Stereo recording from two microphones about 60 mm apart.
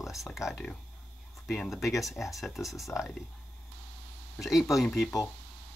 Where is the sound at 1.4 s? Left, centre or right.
Centre.